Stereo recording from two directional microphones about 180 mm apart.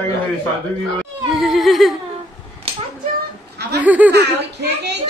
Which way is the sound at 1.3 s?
Centre (ahead or behind).